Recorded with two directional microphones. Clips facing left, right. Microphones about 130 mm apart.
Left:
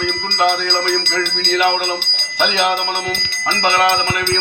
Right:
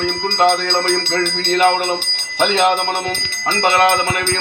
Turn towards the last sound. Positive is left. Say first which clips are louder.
# right 1 dB
turn(degrees=-45)  # may be behind; listen again after turning